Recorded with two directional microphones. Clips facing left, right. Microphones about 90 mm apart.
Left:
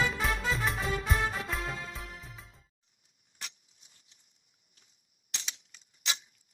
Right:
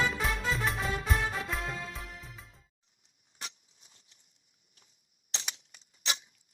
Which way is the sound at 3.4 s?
30° right (ahead or behind).